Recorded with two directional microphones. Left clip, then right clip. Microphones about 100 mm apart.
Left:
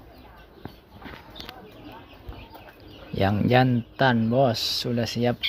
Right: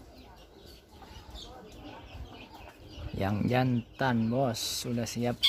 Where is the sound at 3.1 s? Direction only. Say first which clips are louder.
Left 9 dB; 20° left (ahead or behind).